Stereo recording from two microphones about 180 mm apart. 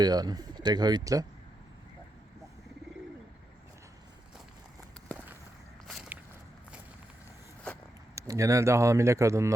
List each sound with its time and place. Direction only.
0.0 s speech: 20° right (ahead or behind)
5.1 s a sound: 5° left (ahead or behind)
5.9 s walk: 5° right (ahead or behind)
8.1 s speech: 15° right (ahead or behind)